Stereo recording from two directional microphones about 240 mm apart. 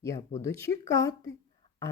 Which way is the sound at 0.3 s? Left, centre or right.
Centre.